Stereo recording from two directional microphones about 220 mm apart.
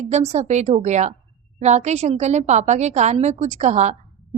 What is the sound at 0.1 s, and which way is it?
A woman's voice, 30° right (ahead or behind).